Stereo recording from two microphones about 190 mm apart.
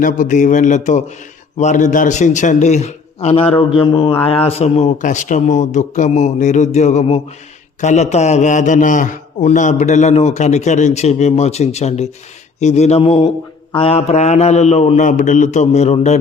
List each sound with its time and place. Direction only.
0.0 s a man's voice: 45° left (ahead or behind)